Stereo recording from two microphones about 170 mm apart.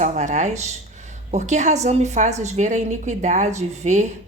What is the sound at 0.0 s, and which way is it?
A woman's voice, 45° right (ahead or behind).